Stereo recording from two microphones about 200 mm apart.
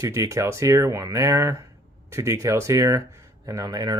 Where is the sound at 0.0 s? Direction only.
15° right (ahead or behind).